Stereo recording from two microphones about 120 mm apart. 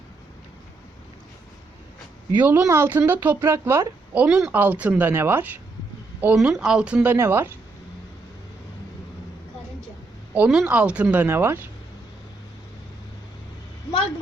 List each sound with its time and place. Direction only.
2.4 s speech: 20° right (ahead or behind)
4.1 s speech: 10° right (ahead or behind)
6.3 s speech: 5° right (ahead or behind); by 7.5 s 20° right (ahead or behind)
10.3 s speech: 10° right (ahead or behind)